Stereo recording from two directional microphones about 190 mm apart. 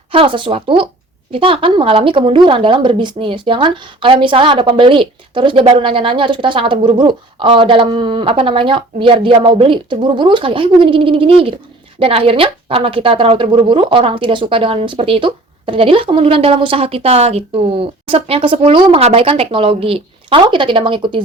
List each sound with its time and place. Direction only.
0.1 s speech: 25° right (ahead or behind)